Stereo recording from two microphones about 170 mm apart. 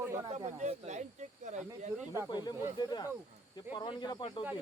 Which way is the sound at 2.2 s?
25° left (ahead or behind).